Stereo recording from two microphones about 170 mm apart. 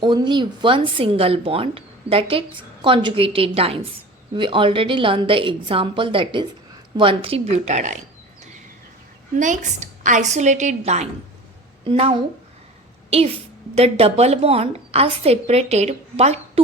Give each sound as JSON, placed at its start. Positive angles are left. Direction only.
{"t": 0.0, "sound": "a woman's voice", "side_deg": -25}
{"t": 9.4, "sound": "a woman's voice", "side_deg": -45}